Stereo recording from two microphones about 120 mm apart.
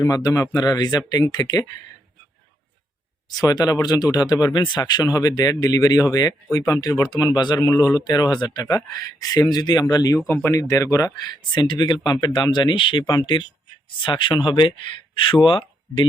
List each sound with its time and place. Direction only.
0.0 s speech: 30° left (ahead or behind)
3.4 s speech: 35° left (ahead or behind)